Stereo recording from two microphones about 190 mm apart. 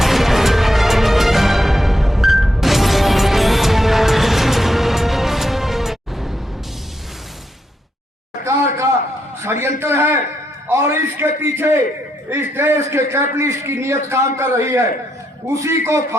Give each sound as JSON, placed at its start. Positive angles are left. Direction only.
{"t": 0.0, "sound": "music", "side_deg": 0}
{"t": 8.4, "sound": "a sound", "side_deg": -15}
{"t": 12.3, "sound": "a man's voice", "side_deg": -10}